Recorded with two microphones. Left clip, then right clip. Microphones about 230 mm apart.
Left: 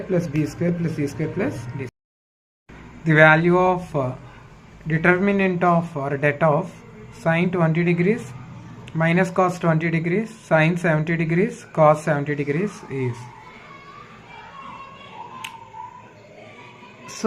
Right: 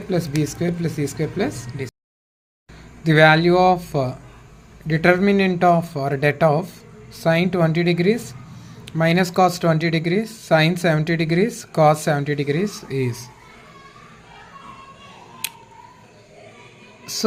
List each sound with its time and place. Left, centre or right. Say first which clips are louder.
0.1 s speech: right 1 dB; right
3.0 s speech: even; right